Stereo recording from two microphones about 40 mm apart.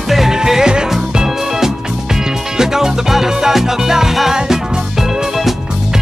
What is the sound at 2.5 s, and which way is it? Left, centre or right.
Music, centre.